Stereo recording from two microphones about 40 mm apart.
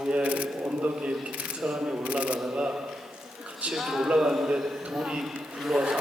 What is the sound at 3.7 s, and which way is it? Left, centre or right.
A man's voice, centre.